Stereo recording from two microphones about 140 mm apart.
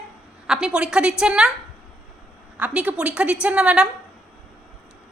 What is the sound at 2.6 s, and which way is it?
A woman's voice, 10° right (ahead or behind).